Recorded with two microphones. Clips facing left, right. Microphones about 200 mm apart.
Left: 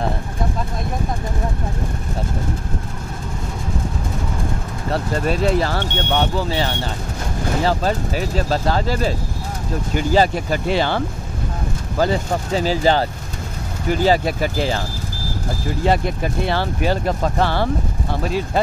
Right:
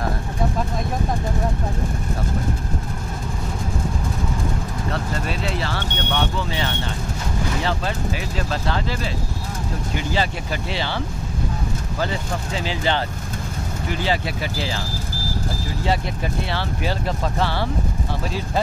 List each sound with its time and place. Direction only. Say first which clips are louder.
4.9 s speech: left 9 dB; 45° left (ahead or behind)
12.0 s speech: left 8 dB; 40° left (ahead or behind)
15.8 s speech: left 5 dB; 55° left (ahead or behind)